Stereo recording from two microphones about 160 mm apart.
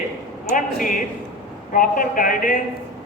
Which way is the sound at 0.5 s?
55° left (ahead or behind).